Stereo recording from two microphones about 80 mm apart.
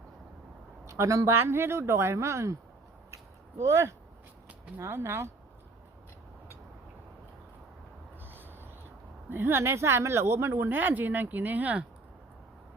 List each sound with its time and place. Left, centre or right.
0.9 s speech: right
3.6 s speech: right
8.2 s a sound: right
9.3 s speech: right